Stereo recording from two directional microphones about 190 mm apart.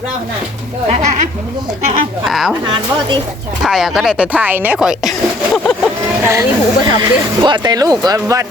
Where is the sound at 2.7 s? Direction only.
25° right (ahead or behind).